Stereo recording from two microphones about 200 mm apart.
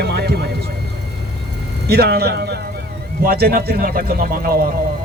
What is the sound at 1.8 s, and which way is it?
A man's voice, 55° right (ahead or behind).